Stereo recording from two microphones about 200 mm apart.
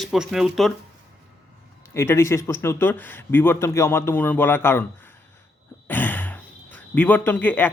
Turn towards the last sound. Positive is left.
turn(degrees=10)  # may be behind; listen again after turning